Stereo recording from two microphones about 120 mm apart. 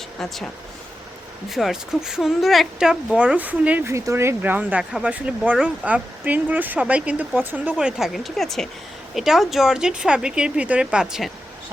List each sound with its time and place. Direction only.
0.2 s speech: 5° left (ahead or behind); by 3.8 s 10° right (ahead or behind)
3.8 s speech: 25° right (ahead or behind); by 11.3 s 5° right (ahead or behind)